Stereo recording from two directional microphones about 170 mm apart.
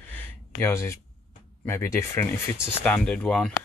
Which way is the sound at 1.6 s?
15° left (ahead or behind).